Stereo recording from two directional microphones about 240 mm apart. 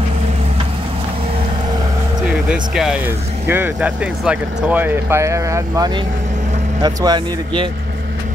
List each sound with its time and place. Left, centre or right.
2.2 s speech: centre